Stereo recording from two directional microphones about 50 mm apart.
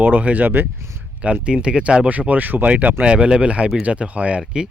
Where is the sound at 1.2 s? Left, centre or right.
Right.